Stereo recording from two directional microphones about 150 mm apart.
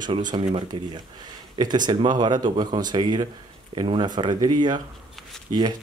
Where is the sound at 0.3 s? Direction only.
35° right (ahead or behind).